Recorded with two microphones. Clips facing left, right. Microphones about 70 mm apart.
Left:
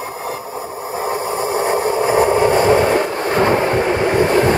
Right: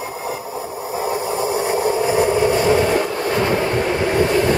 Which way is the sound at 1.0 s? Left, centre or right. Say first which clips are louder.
Left 1 dB; left.